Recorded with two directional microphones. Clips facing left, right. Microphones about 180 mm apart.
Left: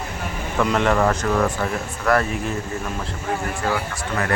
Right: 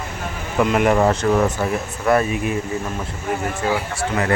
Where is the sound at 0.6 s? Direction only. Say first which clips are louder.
Right 3 dB; 10° right (ahead or behind).